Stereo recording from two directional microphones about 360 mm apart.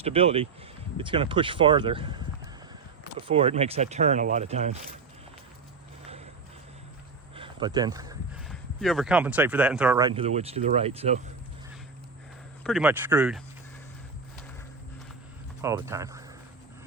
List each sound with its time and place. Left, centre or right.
0.0 s speech: centre
7.3 s a sound: centre
8.4 s speech: centre
12.6 s speech: centre
15.6 s speech: centre